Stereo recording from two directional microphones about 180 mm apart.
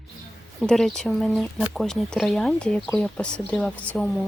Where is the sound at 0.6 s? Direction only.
5° left (ahead or behind).